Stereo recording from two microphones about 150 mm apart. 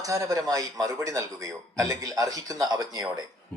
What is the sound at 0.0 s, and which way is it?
A man's voice, 20° right (ahead or behind).